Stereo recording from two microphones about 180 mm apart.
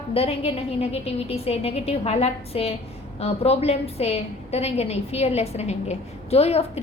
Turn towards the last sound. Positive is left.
turn(degrees=35)  # may be behind; listen again after turning